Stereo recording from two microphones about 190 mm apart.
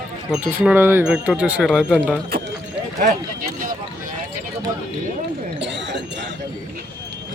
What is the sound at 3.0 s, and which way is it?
Speech, 45° right (ahead or behind).